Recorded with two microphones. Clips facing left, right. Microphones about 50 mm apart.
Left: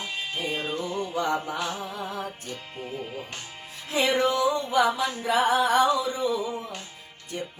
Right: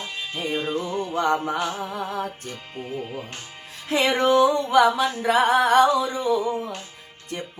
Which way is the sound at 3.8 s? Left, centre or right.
Right.